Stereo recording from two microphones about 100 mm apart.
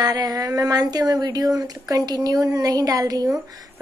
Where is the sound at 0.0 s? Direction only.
40° right (ahead or behind).